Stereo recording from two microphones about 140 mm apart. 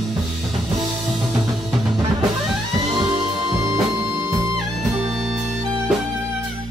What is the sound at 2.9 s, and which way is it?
Music, 30° right (ahead or behind).